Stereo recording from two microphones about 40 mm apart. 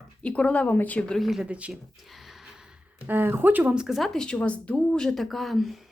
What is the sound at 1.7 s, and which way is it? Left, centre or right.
Speech, centre.